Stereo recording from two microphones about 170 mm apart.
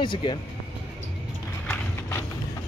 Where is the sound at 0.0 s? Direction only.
30° left (ahead or behind).